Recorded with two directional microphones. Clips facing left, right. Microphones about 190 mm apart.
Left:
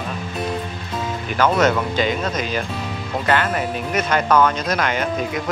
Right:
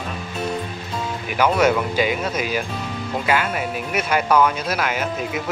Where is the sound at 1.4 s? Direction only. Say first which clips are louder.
Even; 10° right (ahead or behind).